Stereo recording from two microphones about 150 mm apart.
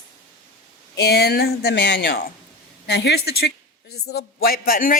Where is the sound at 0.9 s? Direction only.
90° left.